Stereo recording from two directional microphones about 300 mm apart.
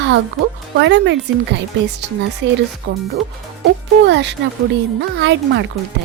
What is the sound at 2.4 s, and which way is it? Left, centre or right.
Speech, right.